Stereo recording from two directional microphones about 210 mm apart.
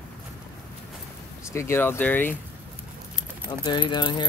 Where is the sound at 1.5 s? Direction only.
10° left (ahead or behind).